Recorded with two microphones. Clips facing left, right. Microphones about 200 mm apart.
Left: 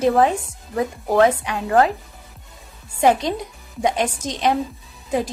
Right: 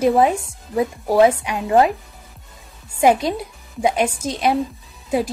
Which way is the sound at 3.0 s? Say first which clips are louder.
Right 1 dB; 10° right (ahead or behind).